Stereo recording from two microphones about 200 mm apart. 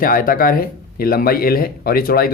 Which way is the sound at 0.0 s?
45° left (ahead or behind).